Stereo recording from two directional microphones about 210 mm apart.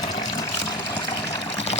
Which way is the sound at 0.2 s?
20° left (ahead or behind).